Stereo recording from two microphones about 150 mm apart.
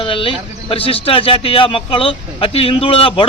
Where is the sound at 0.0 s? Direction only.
35° left (ahead or behind).